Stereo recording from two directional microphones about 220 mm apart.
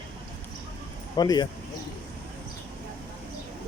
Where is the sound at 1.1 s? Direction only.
20° left (ahead or behind).